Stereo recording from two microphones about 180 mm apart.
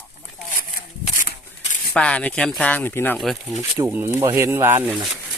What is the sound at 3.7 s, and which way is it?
Speech, 15° right (ahead or behind).